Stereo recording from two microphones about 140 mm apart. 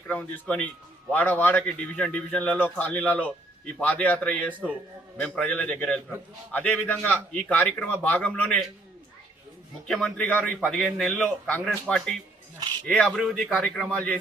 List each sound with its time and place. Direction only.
0.1 s a man's voice: 10° left (ahead or behind)
9.8 s a man's voice: 5° left (ahead or behind)
12.5 s speech: 30° right (ahead or behind)
13.1 s a man's voice: 5° right (ahead or behind)